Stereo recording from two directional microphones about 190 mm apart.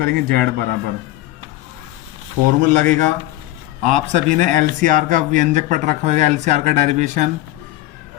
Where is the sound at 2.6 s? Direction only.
40° right (ahead or behind).